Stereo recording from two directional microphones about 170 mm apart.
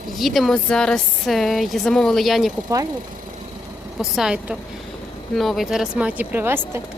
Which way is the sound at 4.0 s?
5° right (ahead or behind).